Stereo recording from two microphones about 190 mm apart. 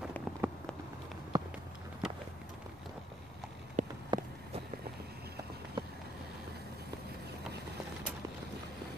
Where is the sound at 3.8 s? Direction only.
40° right (ahead or behind).